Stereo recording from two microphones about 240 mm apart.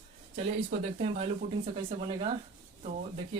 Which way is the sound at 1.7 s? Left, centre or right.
Right.